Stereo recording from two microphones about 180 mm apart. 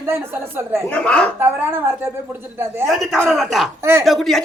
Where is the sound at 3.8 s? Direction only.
15° right (ahead or behind).